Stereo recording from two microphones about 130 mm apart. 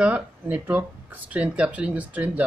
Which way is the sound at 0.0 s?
10° right (ahead or behind).